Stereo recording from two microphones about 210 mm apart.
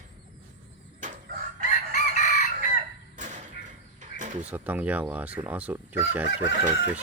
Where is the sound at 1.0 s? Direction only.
40° right (ahead or behind).